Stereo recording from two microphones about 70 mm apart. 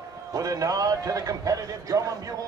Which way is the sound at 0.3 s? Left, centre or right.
Right.